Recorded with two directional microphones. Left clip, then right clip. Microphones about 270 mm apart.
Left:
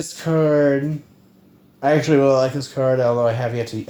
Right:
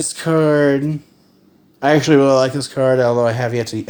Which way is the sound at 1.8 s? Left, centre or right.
Right.